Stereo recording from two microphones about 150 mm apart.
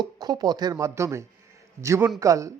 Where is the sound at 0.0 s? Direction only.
25° right (ahead or behind).